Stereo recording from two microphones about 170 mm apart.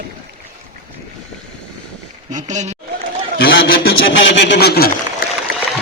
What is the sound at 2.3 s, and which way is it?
Speech, 45° right (ahead or behind).